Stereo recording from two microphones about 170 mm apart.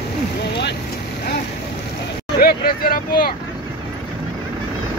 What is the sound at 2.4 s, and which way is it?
Vehicle, 60° left (ahead or behind).